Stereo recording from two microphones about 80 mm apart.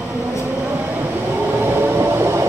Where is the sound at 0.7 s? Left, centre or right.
Right.